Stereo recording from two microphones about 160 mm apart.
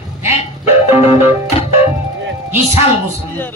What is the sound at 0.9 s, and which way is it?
Music, 40° left (ahead or behind).